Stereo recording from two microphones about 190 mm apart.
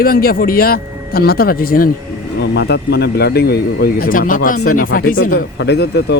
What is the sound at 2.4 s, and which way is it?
Speech, 60° left (ahead or behind).